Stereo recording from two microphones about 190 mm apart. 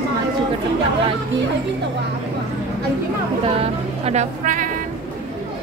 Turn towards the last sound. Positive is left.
turn(degrees=-40)  # may be behind; listen again after turning